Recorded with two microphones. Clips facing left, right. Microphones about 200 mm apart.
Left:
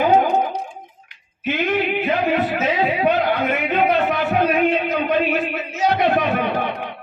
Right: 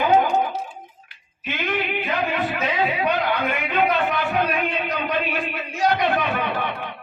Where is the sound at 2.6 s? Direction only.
40° left (ahead or behind).